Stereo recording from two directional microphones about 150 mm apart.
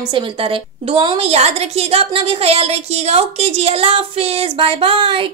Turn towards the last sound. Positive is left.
turn(degrees=-35)  # may be behind; listen again after turning